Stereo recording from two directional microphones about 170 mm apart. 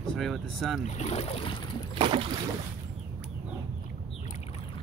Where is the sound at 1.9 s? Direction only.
30° right (ahead or behind).